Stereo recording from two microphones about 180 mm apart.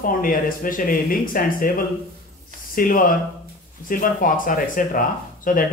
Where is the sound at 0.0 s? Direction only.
50° left (ahead or behind).